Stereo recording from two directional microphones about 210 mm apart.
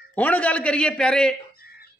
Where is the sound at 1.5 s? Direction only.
45° left (ahead or behind).